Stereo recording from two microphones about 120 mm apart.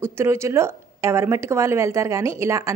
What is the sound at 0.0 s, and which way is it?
A woman's voice, 20° right (ahead or behind).